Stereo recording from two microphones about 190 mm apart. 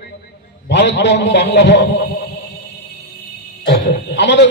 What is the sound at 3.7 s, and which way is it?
Speech, 70° left (ahead or behind).